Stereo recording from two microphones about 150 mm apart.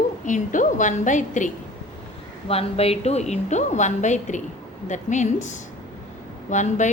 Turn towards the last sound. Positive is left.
turn(degrees=55)  # may be behind; listen again after turning